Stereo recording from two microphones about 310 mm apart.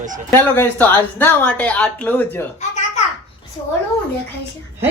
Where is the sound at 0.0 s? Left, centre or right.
Right.